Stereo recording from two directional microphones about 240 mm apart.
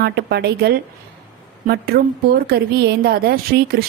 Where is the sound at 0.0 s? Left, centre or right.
Right.